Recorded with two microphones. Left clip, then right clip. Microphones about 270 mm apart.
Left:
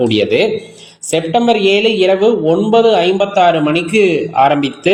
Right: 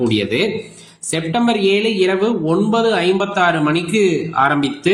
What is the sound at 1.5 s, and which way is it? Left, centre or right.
Speech, centre.